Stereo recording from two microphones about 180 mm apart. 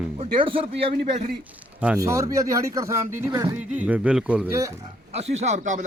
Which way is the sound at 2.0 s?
20° right (ahead or behind).